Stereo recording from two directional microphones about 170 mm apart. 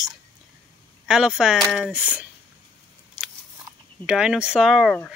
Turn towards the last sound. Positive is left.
turn(degrees=5)  # may be behind; listen again after turning